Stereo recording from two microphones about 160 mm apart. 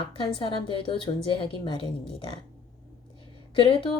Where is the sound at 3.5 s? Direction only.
30° left (ahead or behind).